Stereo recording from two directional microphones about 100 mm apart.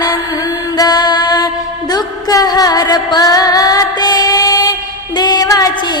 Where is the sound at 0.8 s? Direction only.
45° left (ahead or behind).